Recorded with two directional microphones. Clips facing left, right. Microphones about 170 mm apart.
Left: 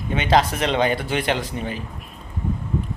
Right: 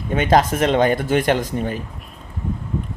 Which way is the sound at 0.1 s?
45° right (ahead or behind).